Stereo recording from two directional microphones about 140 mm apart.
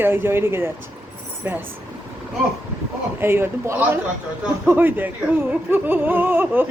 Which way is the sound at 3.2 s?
15° right (ahead or behind).